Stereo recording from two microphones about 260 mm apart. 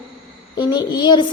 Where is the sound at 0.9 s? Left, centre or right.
Centre.